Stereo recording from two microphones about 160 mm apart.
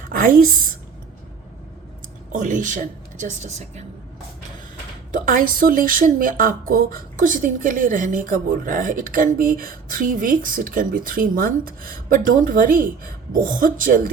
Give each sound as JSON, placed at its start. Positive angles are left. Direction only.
{"t": 0.1, "sound": "a woman's voice", "side_deg": -60}
{"t": 2.3, "sound": "speech", "side_deg": -55}
{"t": 5.1, "sound": "speech", "side_deg": -60}